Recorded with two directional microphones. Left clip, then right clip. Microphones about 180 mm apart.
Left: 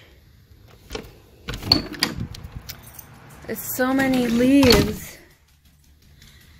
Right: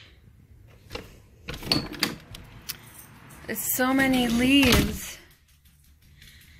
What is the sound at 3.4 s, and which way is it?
A woman's voice, 10° left (ahead or behind).